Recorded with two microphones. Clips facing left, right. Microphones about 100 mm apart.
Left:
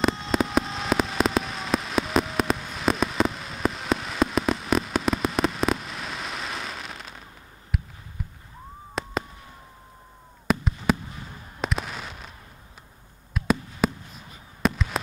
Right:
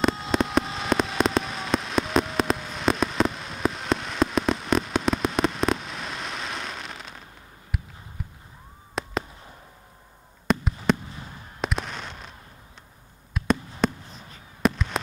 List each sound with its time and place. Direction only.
0.0 s fireworks: centre (ahead or behind)
7.7 s a sound: centre (ahead or behind)
8.2 s fireworks: centre (ahead or behind)
10.4 s fireworks: 5° left (ahead or behind)
13.3 s a sound: centre (ahead or behind)
14.6 s fireworks: centre (ahead or behind)